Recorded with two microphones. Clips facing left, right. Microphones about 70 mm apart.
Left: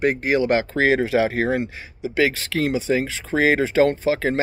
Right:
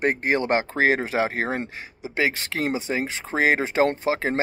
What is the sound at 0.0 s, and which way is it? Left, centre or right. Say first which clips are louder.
Speech: left 3 dB; right.